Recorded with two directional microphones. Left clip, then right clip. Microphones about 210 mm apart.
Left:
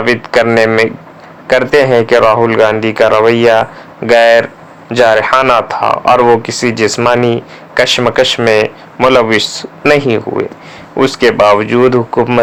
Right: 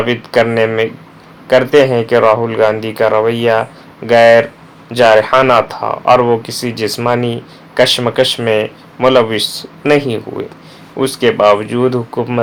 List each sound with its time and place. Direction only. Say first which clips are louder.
0.0 s speech: left 3 dB; 20° left (ahead or behind)